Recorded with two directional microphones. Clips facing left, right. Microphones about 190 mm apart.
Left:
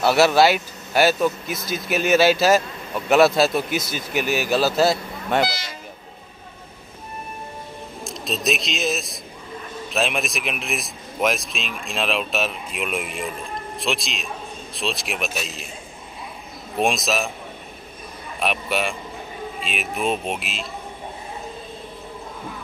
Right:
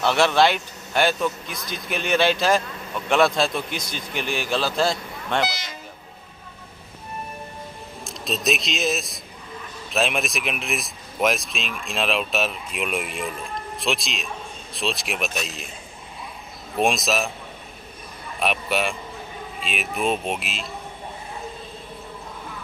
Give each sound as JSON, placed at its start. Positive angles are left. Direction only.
{"t": 0.0, "sound": "a man's voice", "side_deg": 10}
{"t": 5.5, "sound": "speech", "side_deg": -20}
{"t": 8.0, "sound": "a man's voice", "side_deg": 0}
{"t": 16.7, "sound": "speech", "side_deg": 0}
{"t": 18.4, "sound": "speech", "side_deg": 0}